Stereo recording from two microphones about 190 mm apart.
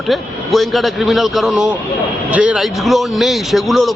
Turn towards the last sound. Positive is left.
turn(degrees=0)  # may be behind; listen again after turning